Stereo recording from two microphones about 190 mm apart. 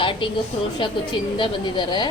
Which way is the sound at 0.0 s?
25° left (ahead or behind).